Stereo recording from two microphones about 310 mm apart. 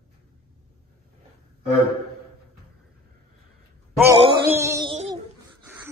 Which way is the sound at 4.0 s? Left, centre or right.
Centre.